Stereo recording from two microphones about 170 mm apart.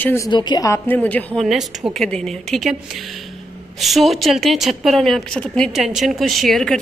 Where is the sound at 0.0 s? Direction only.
15° left (ahead or behind).